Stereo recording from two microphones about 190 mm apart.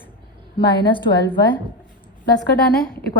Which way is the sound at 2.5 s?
55° left (ahead or behind).